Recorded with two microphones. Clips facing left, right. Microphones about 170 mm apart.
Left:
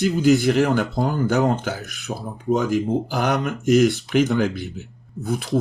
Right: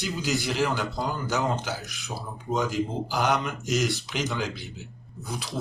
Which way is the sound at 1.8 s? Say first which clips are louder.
Left 6 dB; 60° left (ahead or behind).